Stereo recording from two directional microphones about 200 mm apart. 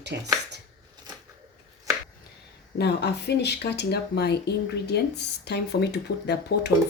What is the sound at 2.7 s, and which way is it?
Speech, 55° left (ahead or behind).